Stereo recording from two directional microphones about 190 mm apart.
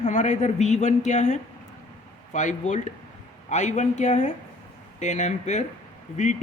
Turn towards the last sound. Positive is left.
turn(degrees=40)  # may be behind; listen again after turning